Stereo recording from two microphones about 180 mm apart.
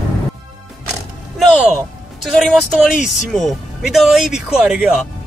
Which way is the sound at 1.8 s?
5° left (ahead or behind).